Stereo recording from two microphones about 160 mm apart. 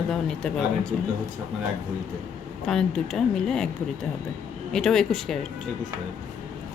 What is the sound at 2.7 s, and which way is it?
Speech, 5° left (ahead or behind).